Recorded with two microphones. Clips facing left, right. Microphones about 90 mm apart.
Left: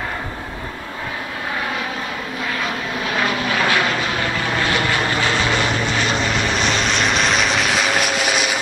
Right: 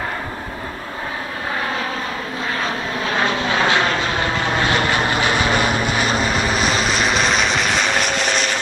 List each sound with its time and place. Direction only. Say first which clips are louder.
2.6 s vehicle: right 1 dB; 35° right (ahead or behind)
4.9 s vehicle: right 1 dB; 15° right (ahead or behind); by 8.5 s 5° left (ahead or behind)